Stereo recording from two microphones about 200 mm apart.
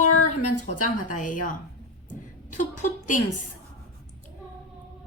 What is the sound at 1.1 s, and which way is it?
Speech, 40° left (ahead or behind).